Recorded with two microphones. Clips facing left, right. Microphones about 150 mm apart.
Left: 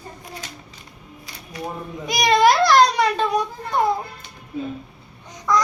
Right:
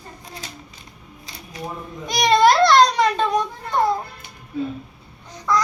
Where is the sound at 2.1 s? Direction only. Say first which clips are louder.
Right 1 dB; 10° left (ahead or behind).